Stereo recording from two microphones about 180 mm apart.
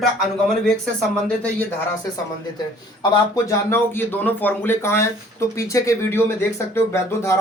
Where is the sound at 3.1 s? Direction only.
15° left (ahead or behind).